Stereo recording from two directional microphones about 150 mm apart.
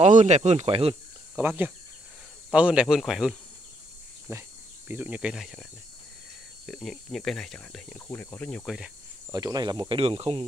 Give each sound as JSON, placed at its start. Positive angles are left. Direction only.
{"t": 0.0, "sound": "speech", "side_deg": -50}
{"t": 1.3, "sound": "speech", "side_deg": -10}
{"t": 4.3, "sound": "speech", "side_deg": -15}
{"t": 8.1, "sound": "speech", "side_deg": 15}
{"t": 8.6, "sound": "speech", "side_deg": -5}
{"t": 9.3, "sound": "speech", "side_deg": -25}